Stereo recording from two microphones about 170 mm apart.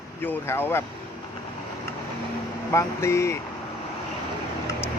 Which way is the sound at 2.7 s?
15° left (ahead or behind).